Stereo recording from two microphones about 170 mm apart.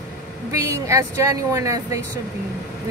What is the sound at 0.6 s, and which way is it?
Speech, 20° right (ahead or behind).